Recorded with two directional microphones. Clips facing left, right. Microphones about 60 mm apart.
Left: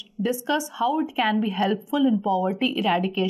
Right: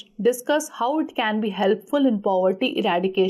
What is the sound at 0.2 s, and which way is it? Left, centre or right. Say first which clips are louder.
A woman's voice: right 4 dB; centre.